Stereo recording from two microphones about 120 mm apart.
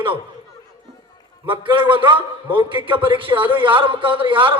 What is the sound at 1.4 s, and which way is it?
A man's voice, 45° right (ahead or behind).